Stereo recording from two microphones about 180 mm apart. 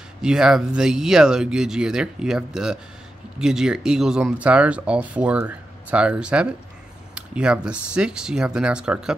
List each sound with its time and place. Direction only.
0.2 s speech: 5° right (ahead or behind)